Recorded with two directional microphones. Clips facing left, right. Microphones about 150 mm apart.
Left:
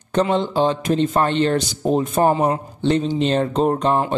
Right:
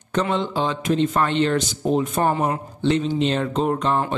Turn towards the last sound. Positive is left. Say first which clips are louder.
# left 3 dB
turn(degrees=35)  # may be behind; listen again after turning